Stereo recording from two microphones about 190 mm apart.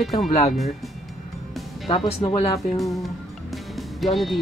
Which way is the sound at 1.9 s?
30° left (ahead or behind).